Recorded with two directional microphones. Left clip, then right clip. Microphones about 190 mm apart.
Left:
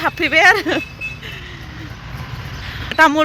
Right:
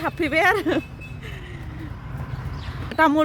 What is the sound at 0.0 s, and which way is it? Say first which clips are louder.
Speech: left 8 dB; 5° right (ahead or behind).